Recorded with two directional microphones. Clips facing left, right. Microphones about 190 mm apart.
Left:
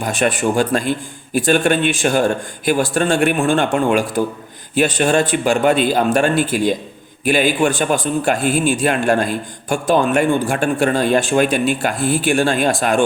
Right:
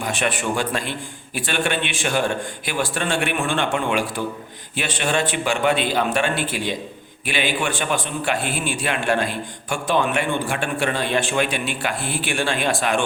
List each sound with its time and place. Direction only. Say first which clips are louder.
0.0 s a man's voice: left 6 dB; 40° left (ahead or behind)